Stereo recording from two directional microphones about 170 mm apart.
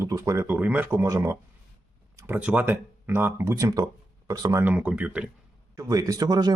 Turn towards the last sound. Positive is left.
turn(degrees=-20)  # may be behind; listen again after turning